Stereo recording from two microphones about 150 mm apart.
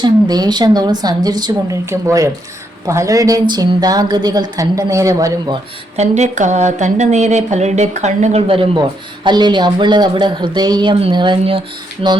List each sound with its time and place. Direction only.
0.0 s a woman's voice: 25° right (ahead or behind)
6.0 s speech: 50° right (ahead or behind)